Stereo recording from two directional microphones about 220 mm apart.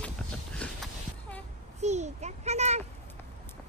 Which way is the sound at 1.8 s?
30° right (ahead or behind).